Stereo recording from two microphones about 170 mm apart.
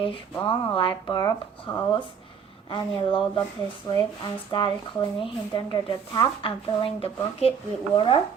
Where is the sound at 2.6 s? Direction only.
30° left (ahead or behind).